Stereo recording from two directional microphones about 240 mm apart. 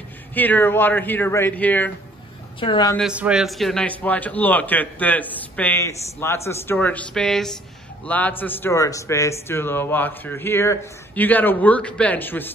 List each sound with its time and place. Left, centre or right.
0.3 s a man's voice: centre
2.6 s a man's voice: centre
3.0 s a man's voice: centre